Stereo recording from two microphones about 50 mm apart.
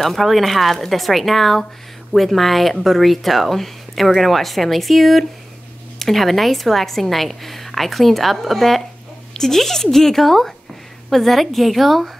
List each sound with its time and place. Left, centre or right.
0.0 s a woman's voice: centre